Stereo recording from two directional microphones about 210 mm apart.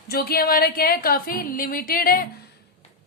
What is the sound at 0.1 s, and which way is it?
A woman's voice, 45° left (ahead or behind).